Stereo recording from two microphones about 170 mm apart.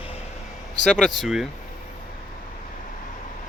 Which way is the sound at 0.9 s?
5° left (ahead or behind).